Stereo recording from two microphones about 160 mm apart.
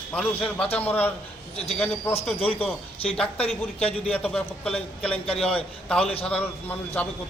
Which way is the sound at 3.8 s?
10° left (ahead or behind).